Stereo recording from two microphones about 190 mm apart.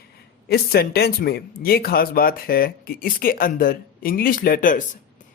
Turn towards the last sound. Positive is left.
turn(degrees=45)  # may be behind; listen again after turning